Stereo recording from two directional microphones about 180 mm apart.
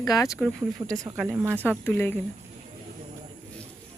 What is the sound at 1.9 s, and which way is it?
Speech, 10° left (ahead or behind).